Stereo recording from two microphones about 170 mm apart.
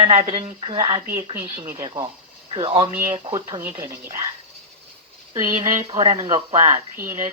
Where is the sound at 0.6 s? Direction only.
30° right (ahead or behind).